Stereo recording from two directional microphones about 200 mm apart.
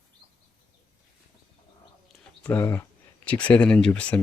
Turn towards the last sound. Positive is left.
turn(degrees=5)  # may be behind; listen again after turning